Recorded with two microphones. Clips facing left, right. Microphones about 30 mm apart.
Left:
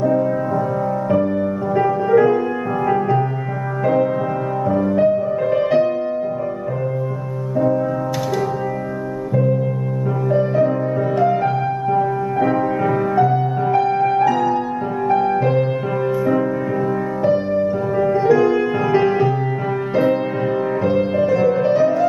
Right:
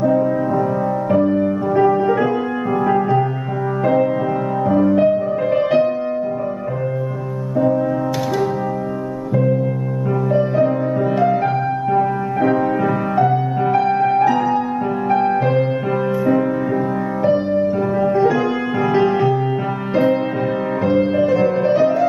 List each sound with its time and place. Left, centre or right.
0.1 s music: centre
4.6 s music: centre
10.3 s music: centre
17.2 s music: centre